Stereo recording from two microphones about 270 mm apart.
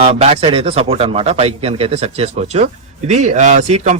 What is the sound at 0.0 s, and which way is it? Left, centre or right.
Speech, right.